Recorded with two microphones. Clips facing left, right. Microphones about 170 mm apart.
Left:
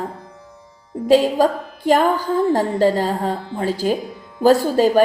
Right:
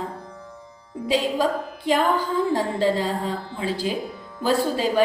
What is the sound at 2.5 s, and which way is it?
Speech, 45° left (ahead or behind).